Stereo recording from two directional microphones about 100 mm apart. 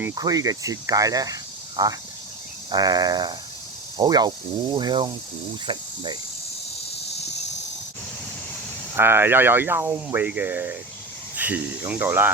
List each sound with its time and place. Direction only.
0.1 s speech: 40° right (ahead or behind)
9.0 s speech: 20° right (ahead or behind)